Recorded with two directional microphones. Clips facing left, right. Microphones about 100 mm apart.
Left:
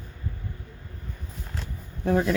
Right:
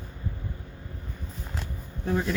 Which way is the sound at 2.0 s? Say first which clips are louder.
Left 5 dB; 55° left (ahead or behind).